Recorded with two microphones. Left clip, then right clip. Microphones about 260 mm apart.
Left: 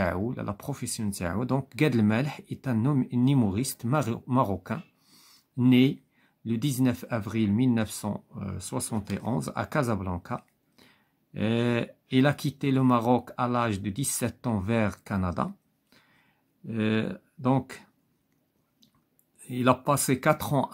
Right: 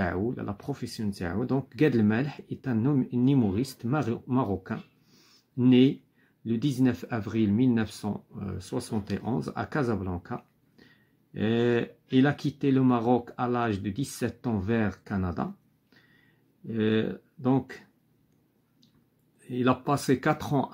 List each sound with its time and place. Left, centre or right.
0.3 s speech: left
5.1 s a sound: left
6.4 s speech: left
10.0 s a sound: left
12.1 s speech: left
19.4 s speech: left